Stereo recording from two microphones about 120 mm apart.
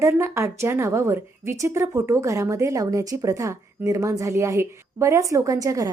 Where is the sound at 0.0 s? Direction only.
20° right (ahead or behind).